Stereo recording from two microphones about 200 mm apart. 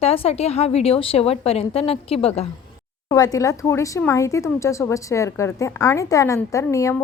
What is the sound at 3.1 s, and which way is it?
Speech, 15° left (ahead or behind).